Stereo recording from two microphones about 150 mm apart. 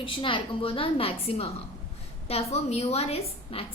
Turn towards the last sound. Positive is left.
turn(degrees=40)  # may be behind; listen again after turning